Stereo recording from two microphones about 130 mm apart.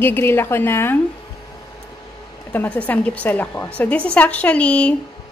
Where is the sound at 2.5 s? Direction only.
10° left (ahead or behind).